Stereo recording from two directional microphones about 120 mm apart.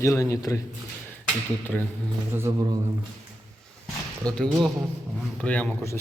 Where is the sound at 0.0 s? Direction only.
25° left (ahead or behind).